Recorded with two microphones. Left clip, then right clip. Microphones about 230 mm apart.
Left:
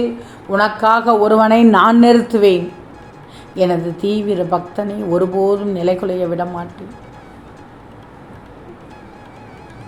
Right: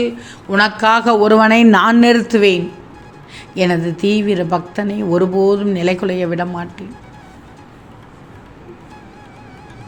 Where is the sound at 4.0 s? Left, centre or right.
Right.